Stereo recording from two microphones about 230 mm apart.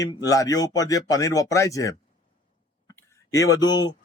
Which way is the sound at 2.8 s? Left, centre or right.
Centre.